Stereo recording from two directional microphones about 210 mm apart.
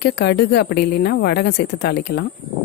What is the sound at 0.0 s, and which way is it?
A woman's voice, 50° left (ahead or behind).